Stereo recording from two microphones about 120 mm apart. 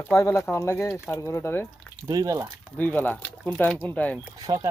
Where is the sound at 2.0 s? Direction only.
30° right (ahead or behind).